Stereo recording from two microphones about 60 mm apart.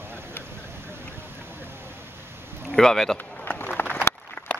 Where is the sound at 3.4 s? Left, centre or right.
Left.